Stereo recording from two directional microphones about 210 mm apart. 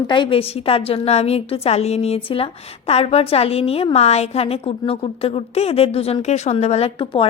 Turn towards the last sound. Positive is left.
turn(degrees=25)  # may be behind; listen again after turning